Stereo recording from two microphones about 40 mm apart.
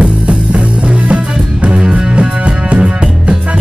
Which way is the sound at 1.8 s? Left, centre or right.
Centre.